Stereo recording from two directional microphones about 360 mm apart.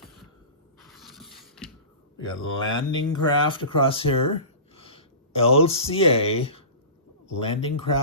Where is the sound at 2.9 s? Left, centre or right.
Centre.